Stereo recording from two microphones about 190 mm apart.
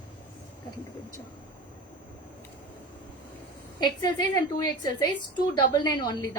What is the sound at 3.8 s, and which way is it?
A woman's voice, 20° left (ahead or behind).